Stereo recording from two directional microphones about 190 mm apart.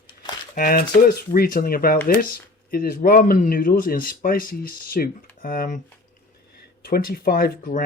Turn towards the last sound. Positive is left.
turn(degrees=50)  # may be behind; listen again after turning